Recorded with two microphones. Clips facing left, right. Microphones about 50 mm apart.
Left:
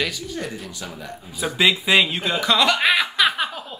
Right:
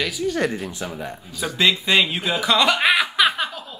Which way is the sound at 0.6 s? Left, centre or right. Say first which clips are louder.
Right 4 dB; right.